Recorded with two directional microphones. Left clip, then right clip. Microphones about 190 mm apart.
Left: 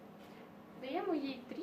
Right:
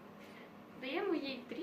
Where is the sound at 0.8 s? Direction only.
35° left (ahead or behind).